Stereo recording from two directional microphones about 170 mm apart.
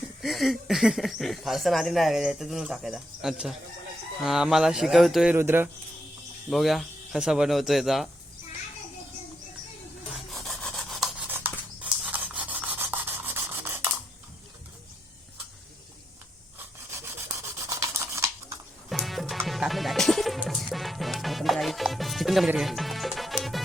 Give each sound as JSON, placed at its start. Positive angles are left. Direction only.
{"t": 0.2, "sound": "speech", "side_deg": 0}
{"t": 5.4, "sound": "speech", "side_deg": -15}
{"t": 6.5, "sound": "speech", "side_deg": 0}
{"t": 10.1, "sound": "rub", "side_deg": 0}
{"t": 11.3, "sound": "a sound", "side_deg": -10}
{"t": 11.8, "sound": "rub", "side_deg": -10}
{"t": 17.7, "sound": "scissors", "side_deg": -15}
{"t": 18.9, "sound": "music", "side_deg": 0}